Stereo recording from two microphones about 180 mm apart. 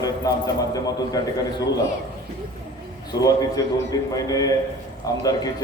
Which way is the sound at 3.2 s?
20° left (ahead or behind).